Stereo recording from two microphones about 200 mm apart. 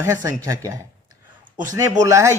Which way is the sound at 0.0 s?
15° right (ahead or behind).